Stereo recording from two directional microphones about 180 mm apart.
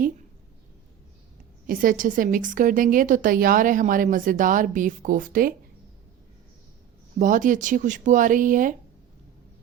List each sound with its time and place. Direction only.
1.6 s a woman's voice: 50° right (ahead or behind)
7.2 s a woman's voice: 45° right (ahead or behind)